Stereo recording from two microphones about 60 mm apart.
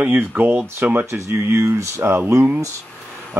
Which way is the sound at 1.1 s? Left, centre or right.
Right.